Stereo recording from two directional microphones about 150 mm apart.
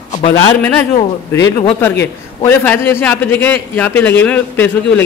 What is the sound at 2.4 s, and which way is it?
A man's voice, 15° left (ahead or behind).